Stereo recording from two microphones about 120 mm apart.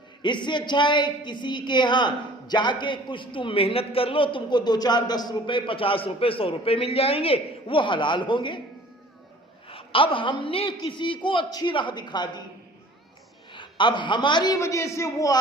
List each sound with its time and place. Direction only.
0.2 s a woman's voice: 40° left (ahead or behind)
9.6 s a woman's voice: 50° left (ahead or behind)
13.5 s a man's voice: 40° left (ahead or behind)
14.6 s a man's voice: 25° left (ahead or behind)